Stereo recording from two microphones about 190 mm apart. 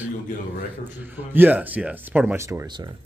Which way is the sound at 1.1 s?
10° right (ahead or behind).